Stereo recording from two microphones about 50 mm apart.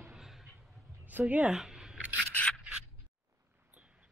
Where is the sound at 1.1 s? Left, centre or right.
Right.